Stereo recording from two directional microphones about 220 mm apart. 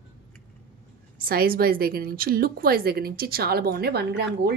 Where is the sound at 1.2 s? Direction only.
40° right (ahead or behind).